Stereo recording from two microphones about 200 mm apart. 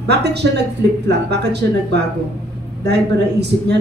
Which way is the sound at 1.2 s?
55° right (ahead or behind).